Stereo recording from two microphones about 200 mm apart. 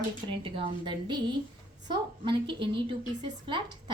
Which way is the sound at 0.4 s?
25° right (ahead or behind).